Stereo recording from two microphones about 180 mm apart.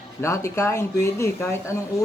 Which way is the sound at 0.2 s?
15° left (ahead or behind).